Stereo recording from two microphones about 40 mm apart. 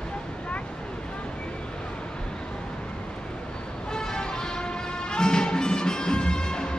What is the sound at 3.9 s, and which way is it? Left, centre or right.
Music, centre.